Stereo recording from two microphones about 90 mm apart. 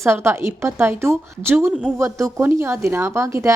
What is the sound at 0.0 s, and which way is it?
A woman's voice, 30° right (ahead or behind).